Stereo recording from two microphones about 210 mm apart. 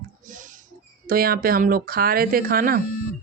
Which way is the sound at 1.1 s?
45° right (ahead or behind).